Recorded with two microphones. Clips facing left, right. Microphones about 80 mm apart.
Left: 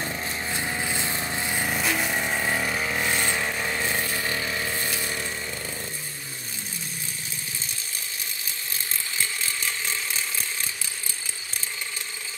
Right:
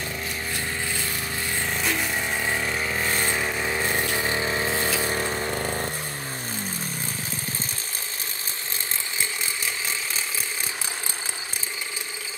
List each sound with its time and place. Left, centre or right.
0.0 s vehicle: left
1.8 s vehicle: centre; by 4.9 s right
5.0 s a sound: right